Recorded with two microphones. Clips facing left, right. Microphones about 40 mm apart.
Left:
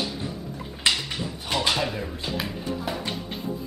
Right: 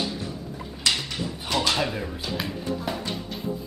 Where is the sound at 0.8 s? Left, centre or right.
Left.